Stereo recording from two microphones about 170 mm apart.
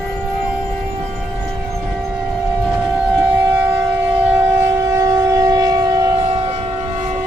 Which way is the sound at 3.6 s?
10° right (ahead or behind).